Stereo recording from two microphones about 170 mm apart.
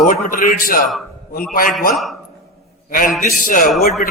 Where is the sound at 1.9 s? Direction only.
Centre (ahead or behind).